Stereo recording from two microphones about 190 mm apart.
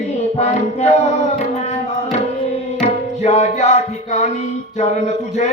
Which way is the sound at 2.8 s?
35° left (ahead or behind).